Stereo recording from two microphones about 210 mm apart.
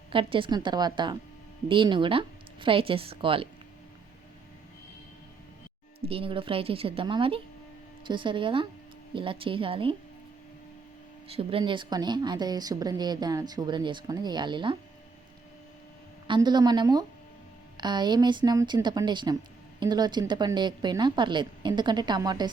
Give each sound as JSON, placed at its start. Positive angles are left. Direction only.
{"t": 0.1, "sound": "a woman's voice", "side_deg": -25}
{"t": 6.1, "sound": "a woman's voice", "side_deg": -25}
{"t": 11.3, "sound": "a woman's voice", "side_deg": -25}
{"t": 16.2, "sound": "a woman's voice", "side_deg": -20}